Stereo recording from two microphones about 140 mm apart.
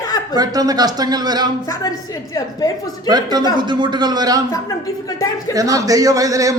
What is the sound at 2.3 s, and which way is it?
Speech, 25° left (ahead or behind).